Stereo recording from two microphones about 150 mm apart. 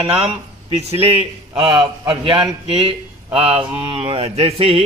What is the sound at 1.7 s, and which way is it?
Speech, 25° right (ahead or behind).